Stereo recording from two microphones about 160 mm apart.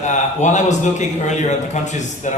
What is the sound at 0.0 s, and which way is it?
A man's voice, 50° left (ahead or behind).